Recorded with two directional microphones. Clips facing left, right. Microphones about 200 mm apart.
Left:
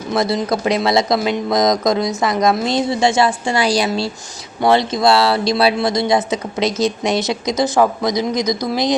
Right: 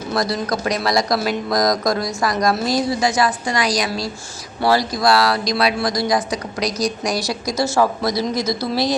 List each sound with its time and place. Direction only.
0.1 s speech: 25° left (ahead or behind)